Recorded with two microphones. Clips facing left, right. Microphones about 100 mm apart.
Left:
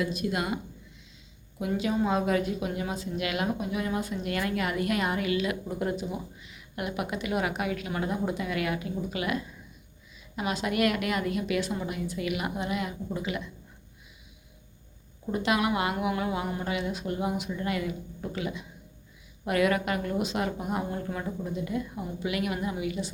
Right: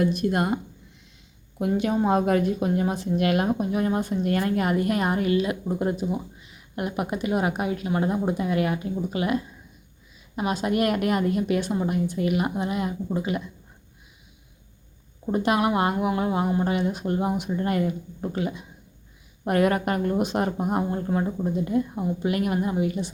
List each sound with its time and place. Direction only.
0.0 s a woman's voice: 50° right (ahead or behind)
15.3 s speech: 40° right (ahead or behind)
16.7 s a woman's voice: 45° right (ahead or behind)